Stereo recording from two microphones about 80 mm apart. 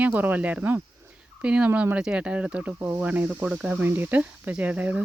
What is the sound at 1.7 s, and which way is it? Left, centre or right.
Speech, right.